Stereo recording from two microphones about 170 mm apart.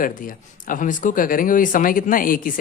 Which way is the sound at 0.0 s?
55° left (ahead or behind).